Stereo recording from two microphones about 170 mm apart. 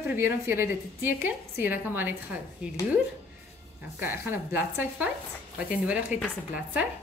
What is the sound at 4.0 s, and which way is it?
A woman's voice, 10° right (ahead or behind).